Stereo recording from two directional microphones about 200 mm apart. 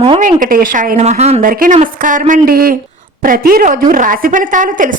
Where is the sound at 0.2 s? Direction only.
40° right (ahead or behind).